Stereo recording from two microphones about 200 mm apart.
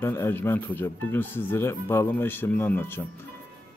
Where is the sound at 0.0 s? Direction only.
10° left (ahead or behind).